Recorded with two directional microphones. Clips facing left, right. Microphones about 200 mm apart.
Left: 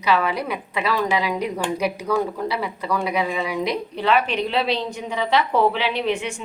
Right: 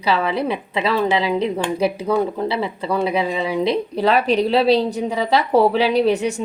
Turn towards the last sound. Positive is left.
turn(degrees=-40)  # may be behind; listen again after turning